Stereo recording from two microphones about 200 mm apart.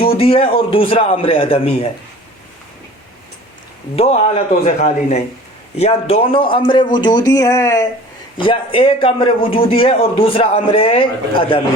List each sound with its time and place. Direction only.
0.2 s a man's voice: 30° left (ahead or behind)
3.9 s a man's voice: 30° left (ahead or behind); by 7.9 s 15° left (ahead or behind)
8.4 s a man's voice: 25° left (ahead or behind)